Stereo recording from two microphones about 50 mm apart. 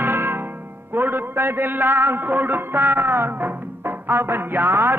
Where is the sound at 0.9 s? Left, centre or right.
Right.